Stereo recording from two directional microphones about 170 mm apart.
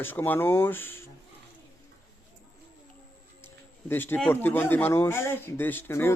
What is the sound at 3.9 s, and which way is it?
A man's voice, 10° left (ahead or behind).